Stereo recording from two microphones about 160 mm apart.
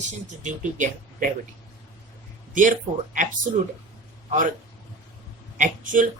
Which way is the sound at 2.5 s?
55° right (ahead or behind).